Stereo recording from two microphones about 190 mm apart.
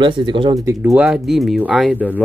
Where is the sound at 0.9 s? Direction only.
Centre (ahead or behind).